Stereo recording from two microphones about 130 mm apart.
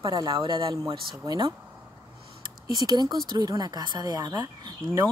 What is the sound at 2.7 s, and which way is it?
Speech, 30° right (ahead or behind).